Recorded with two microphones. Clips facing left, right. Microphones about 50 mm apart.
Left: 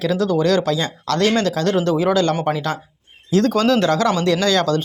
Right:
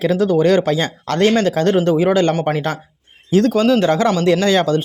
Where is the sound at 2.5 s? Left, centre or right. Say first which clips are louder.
Right 2 dB; right.